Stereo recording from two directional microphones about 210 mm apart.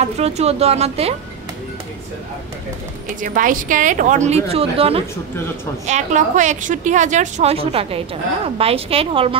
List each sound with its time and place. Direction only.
0.0 s a woman's voice: 30° right (ahead or behind)
3.2 s a woman's voice: 40° right (ahead or behind)